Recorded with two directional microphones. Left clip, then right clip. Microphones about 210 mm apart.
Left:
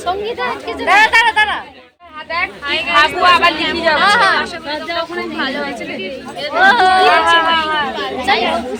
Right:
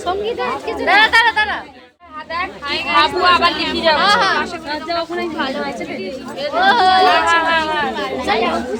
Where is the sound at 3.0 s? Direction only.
30° left (ahead or behind).